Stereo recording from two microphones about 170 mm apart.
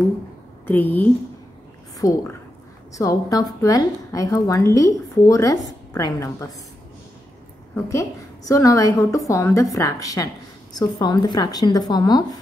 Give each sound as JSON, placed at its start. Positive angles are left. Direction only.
{"t": 0.7, "sound": "a woman's voice", "side_deg": 10}
{"t": 7.7, "sound": "a woman's voice", "side_deg": 15}